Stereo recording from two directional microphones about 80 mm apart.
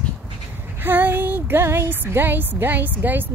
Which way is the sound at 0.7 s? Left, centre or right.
Right.